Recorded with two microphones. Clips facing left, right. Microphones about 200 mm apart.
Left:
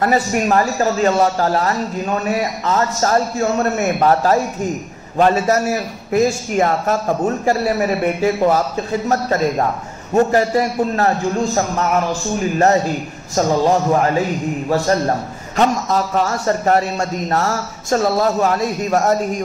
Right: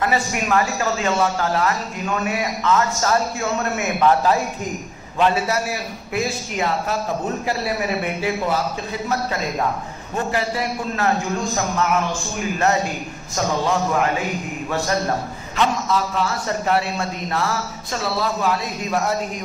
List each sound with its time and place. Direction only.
0.0 s a man's voice: 40° left (ahead or behind)